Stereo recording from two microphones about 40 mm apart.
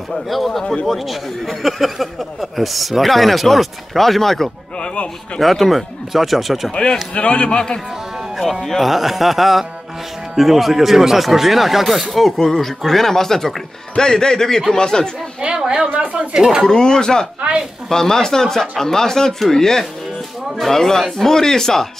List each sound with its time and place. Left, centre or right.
0.3 s speech: centre
4.7 s a sound: left
5.4 s speech: centre
6.7 s a man's voice: left
8.4 s speech: centre
15.4 s a woman's voice: centre
15.9 s speech: right
16.6 s speech: centre